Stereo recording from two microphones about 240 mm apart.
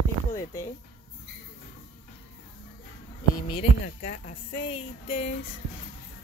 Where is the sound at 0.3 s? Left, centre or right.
Centre.